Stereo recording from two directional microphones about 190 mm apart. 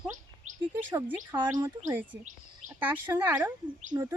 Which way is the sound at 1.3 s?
10° right (ahead or behind).